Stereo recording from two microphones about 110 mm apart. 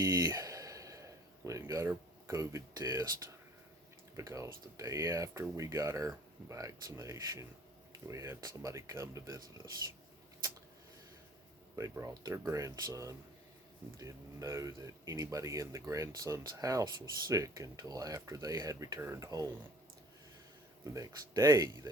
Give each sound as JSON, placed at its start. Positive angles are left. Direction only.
{"t": 0.0, "sound": "a sound", "side_deg": -30}
{"t": 4.2, "sound": "speech", "side_deg": -30}
{"t": 11.8, "sound": "speech", "side_deg": -30}
{"t": 20.8, "sound": "speech", "side_deg": -30}